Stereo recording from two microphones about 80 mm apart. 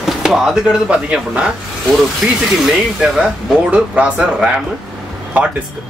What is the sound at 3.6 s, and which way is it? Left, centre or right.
Speech, centre.